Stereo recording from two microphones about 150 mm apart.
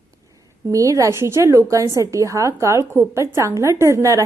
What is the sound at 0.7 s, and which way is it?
A woman's voice, 20° right (ahead or behind).